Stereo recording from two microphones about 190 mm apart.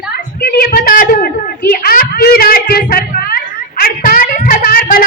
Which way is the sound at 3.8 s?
50° left (ahead or behind).